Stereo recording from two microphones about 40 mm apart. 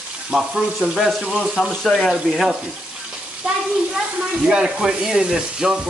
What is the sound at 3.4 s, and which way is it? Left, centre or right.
Speech, centre.